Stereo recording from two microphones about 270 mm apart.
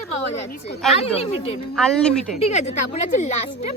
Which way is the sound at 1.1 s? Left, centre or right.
Left.